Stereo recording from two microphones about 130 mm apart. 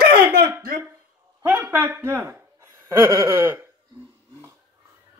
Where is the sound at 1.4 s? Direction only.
10° right (ahead or behind).